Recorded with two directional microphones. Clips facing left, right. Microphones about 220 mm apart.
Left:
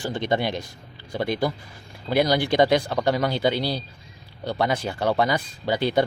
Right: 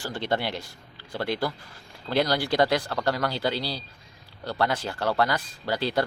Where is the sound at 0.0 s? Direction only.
15° left (ahead or behind).